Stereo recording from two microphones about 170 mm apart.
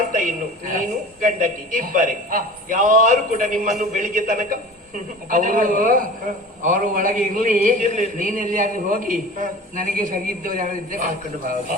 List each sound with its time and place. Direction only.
0.1 s a woman's voice: 50° right (ahead or behind)